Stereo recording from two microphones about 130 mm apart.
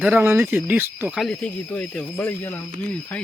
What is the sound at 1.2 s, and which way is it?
Speech, 5° left (ahead or behind).